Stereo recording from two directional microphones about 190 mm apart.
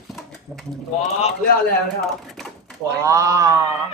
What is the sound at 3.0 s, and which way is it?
Speech, 15° right (ahead or behind).